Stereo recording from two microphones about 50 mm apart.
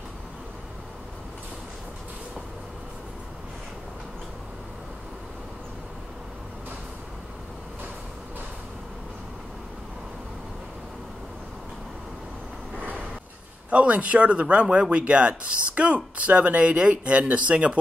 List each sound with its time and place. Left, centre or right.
12.7 s vehicle: right
13.7 s speech: right